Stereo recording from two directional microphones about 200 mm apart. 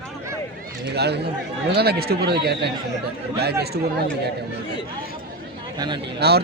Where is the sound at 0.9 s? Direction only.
55° right (ahead or behind).